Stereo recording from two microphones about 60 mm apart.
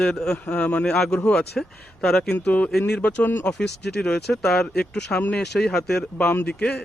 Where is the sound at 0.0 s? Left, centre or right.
Centre.